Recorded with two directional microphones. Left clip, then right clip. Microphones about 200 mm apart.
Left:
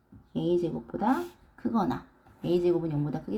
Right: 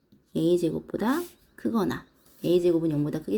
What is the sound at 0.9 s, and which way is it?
Speech, 45° right (ahead or behind).